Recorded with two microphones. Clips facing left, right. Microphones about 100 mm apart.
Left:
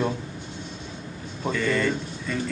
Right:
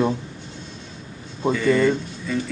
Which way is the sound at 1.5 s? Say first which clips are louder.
Right 6 dB; 5° right (ahead or behind).